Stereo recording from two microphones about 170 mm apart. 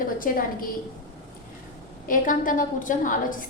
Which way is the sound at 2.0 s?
50° left (ahead or behind).